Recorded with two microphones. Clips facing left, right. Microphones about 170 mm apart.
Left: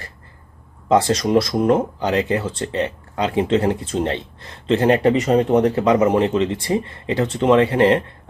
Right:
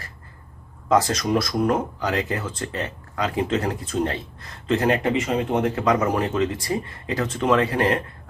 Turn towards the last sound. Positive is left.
turn(degrees=25)  # may be behind; listen again after turning